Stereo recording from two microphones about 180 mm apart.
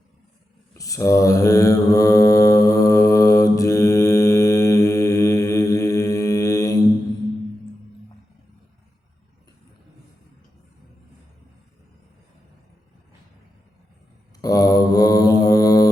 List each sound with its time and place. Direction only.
0.8 s mantra: 20° left (ahead or behind)
14.4 s mantra: 20° left (ahead or behind)